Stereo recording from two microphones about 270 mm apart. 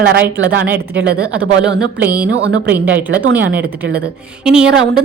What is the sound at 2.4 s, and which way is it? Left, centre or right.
Speech, right.